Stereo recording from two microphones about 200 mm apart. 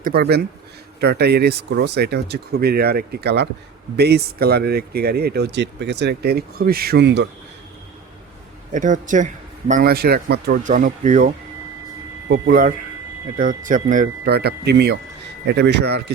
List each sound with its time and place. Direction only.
0.0 s speech: 50° right (ahead or behind)
8.7 s speech: 40° right (ahead or behind)
10.6 s speech: 40° right (ahead or behind)
12.3 s speech: 45° right (ahead or behind)